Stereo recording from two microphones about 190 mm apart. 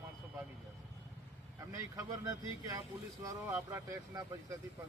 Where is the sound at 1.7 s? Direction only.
15° right (ahead or behind).